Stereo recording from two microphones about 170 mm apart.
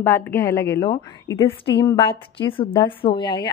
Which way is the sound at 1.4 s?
30° left (ahead or behind).